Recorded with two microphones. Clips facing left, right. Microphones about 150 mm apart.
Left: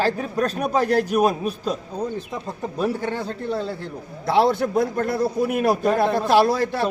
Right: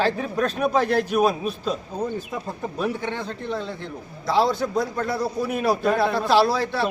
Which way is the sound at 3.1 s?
40° left (ahead or behind).